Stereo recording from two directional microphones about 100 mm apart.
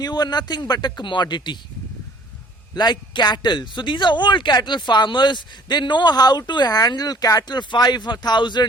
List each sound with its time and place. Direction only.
0.0 s speech: 45° left (ahead or behind)
2.7 s speech: 45° left (ahead or behind)